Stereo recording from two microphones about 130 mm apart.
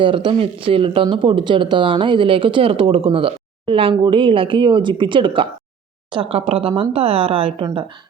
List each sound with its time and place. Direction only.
0.0 s speech: 40° right (ahead or behind)